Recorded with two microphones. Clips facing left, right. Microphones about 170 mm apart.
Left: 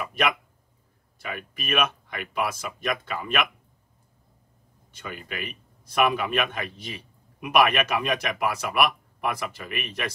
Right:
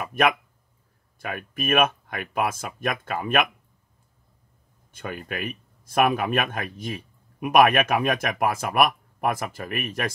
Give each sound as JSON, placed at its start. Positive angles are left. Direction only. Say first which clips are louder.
{"t": 1.2, "sound": "speech", "louder": "right 5 dB", "side_deg": -50}
{"t": 4.9, "sound": "speech", "louder": "right 4 dB", "side_deg": -50}